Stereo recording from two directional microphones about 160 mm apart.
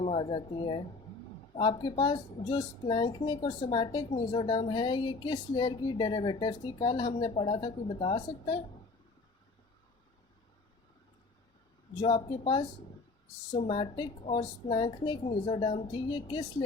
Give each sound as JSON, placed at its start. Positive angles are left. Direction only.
{"t": 0.0, "sound": "speech", "side_deg": 35}
{"t": 11.9, "sound": "speech", "side_deg": 30}
{"t": 13.7, "sound": "speech", "side_deg": 30}